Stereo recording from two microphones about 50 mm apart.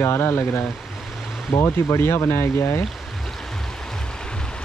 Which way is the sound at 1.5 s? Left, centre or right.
Left.